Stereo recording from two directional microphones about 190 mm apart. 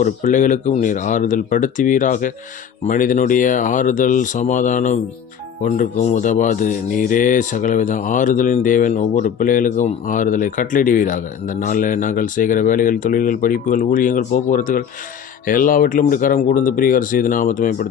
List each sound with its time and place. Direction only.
0.0 s speech: 40° left (ahead or behind)